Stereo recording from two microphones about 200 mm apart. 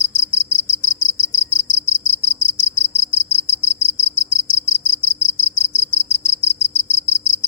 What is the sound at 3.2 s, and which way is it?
Cricket, 25° right (ahead or behind).